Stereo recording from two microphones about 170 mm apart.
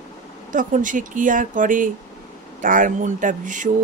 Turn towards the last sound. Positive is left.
turn(degrees=-50)  # may be behind; listen again after turning